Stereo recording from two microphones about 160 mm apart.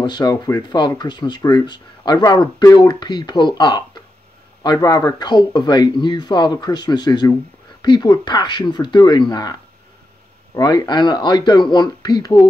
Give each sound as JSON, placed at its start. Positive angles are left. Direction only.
{"t": 0.0, "sound": "speech", "side_deg": 25}